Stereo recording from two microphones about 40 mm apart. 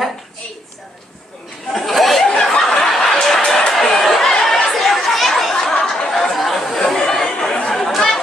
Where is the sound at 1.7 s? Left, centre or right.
Centre.